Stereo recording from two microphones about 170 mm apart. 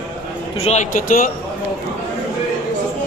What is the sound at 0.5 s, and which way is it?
Speech, 40° left (ahead or behind).